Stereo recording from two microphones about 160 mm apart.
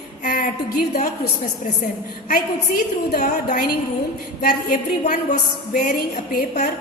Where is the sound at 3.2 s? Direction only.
50° left (ahead or behind); by 6.5 s 70° left (ahead or behind).